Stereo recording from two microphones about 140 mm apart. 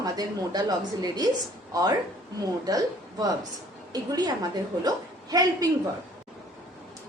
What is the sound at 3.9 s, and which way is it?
A woman's voice, 30° right (ahead or behind).